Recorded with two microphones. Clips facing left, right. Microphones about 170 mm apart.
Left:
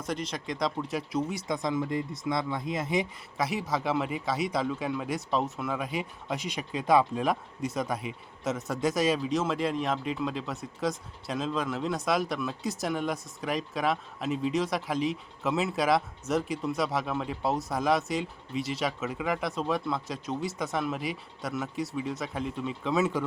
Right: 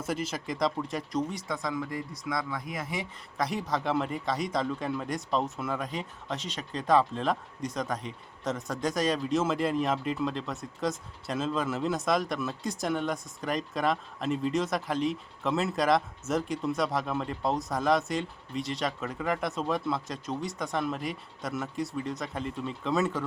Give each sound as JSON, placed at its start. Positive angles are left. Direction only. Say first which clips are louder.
{"t": 0.0, "sound": "speech", "louder": "right 1 dB", "side_deg": -5}
{"t": 3.3, "sound": "a man's voice", "louder": "even", "side_deg": 5}